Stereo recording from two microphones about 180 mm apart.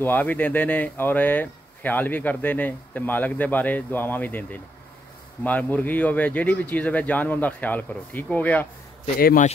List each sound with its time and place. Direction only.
0.0 s speech: 10° left (ahead or behind)
9.2 s a man's voice: 50° left (ahead or behind)